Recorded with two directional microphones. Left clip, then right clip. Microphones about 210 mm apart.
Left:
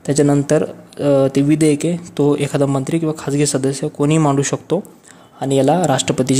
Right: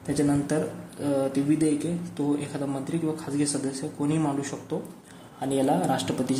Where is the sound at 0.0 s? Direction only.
50° left (ahead or behind).